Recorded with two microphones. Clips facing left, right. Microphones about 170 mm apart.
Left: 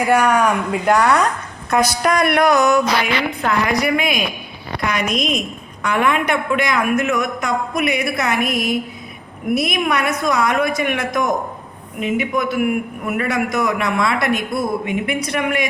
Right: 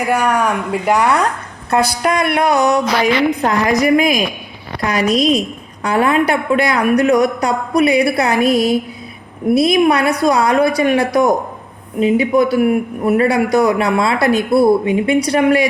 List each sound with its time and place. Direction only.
0.1 s speech: 5° right (ahead or behind)
2.0 s a woman's voice: 25° right (ahead or behind)